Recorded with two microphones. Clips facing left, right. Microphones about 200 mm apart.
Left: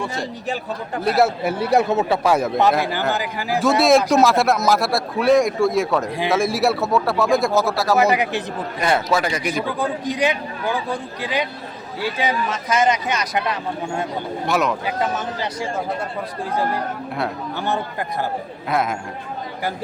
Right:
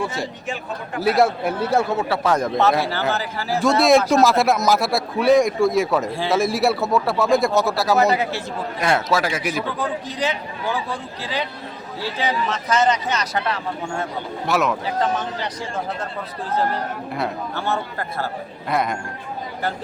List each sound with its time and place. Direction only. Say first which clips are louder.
1.0 s speech: even; 5° left (ahead or behind); by 2.1 s 20° left (ahead or behind)
2.2 s speech: right 1 dB; 10° left (ahead or behind)
3.6 s a man's voice: even; centre (ahead or behind)
7.9 s speech: left 2 dB; 15° left (ahead or behind)
8.8 s a man's voice: left 1 dB; centre (ahead or behind)
9.7 s speech: left 3 dB; 15° left (ahead or behind)
14.4 s a man's voice: even; centre (ahead or behind)
14.8 s speech: right 1 dB; 10° left (ahead or behind)
18.7 s a man's voice: left 1 dB; centre (ahead or behind)